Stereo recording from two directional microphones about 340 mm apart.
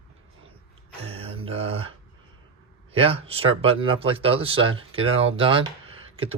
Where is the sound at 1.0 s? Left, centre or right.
Centre.